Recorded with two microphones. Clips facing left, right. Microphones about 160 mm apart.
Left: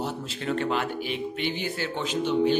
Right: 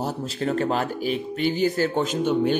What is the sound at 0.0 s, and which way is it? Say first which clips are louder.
Speech: right 4 dB; 40° right (ahead or behind).